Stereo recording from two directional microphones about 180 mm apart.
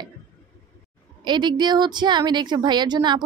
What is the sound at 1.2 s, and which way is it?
Speech, 25° right (ahead or behind).